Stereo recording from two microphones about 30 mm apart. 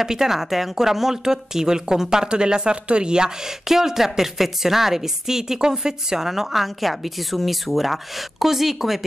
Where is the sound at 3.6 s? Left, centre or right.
Centre.